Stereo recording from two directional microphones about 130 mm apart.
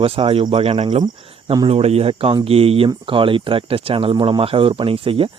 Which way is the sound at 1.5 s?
40° right (ahead or behind).